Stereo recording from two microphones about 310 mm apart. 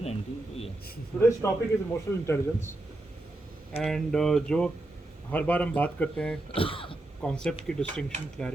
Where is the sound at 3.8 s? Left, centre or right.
Centre.